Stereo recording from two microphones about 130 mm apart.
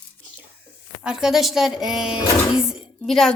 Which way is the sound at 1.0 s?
5° right (ahead or behind).